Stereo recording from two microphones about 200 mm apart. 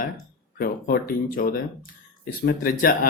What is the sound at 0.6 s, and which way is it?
Speech, 45° left (ahead or behind).